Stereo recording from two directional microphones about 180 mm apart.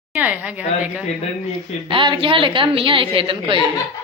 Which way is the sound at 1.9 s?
30° right (ahead or behind).